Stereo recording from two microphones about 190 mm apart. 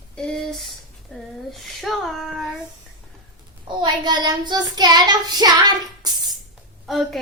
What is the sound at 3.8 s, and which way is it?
Child singing, 25° right (ahead or behind).